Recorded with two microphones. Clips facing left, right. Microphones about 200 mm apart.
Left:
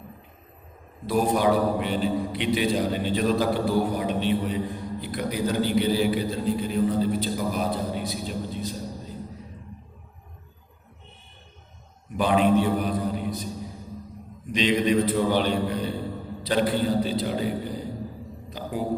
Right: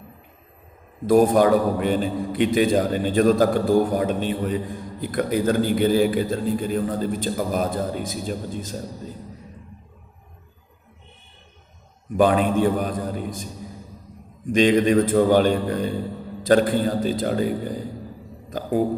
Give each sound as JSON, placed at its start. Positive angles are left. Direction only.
{"t": 1.0, "sound": "a man's voice", "side_deg": -50}
{"t": 12.1, "sound": "a man's voice", "side_deg": -50}
{"t": 14.5, "sound": "a man's voice", "side_deg": -50}
{"t": 18.5, "sound": "a sound", "side_deg": -50}